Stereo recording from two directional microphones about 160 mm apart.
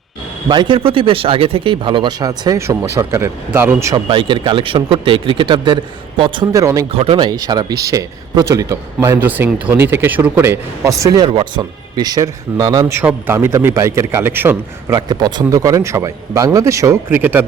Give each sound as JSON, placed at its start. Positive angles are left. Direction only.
{"t": 0.4, "sound": "speech", "side_deg": -30}
{"t": 3.9, "sound": "speech", "side_deg": -30}
{"t": 6.9, "sound": "speech", "side_deg": -35}
{"t": 13.0, "sound": "a man's voice", "side_deg": -10}
{"t": 14.9, "sound": "speech", "side_deg": -25}